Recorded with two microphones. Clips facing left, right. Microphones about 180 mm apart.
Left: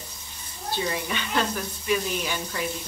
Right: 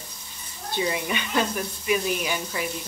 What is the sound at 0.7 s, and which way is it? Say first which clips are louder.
Speech: right 3 dB; 10° right (ahead or behind).